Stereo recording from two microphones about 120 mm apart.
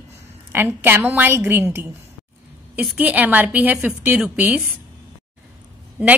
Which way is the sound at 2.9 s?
15° right (ahead or behind).